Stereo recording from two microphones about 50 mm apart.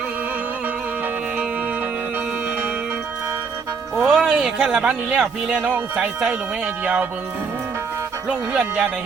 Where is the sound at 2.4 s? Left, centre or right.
Right.